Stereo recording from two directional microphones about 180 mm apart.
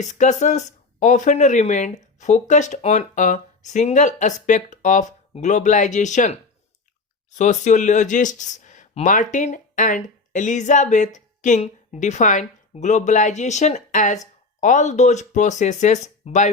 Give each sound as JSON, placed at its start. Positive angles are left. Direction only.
{"t": 0.0, "sound": "speech", "side_deg": 40}